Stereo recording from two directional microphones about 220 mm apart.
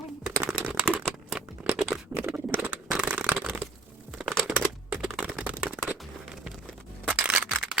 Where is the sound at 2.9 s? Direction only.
5° right (ahead or behind).